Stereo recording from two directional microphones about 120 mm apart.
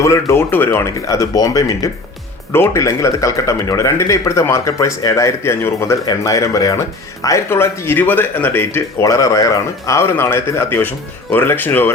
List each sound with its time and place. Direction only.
0.0 s speech: 25° left (ahead or behind)
1.0 s speech: 25° left (ahead or behind)